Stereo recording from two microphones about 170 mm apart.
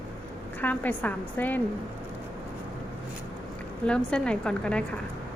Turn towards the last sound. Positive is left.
turn(degrees=5)  # may be behind; listen again after turning